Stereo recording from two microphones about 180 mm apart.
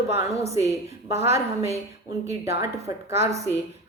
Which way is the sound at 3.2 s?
15° right (ahead or behind).